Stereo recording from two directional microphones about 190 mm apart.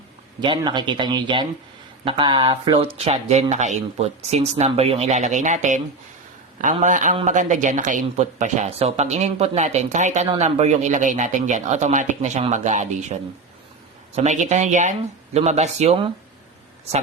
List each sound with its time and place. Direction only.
0.4 s speech: 25° right (ahead or behind)
14.2 s speech: 40° right (ahead or behind)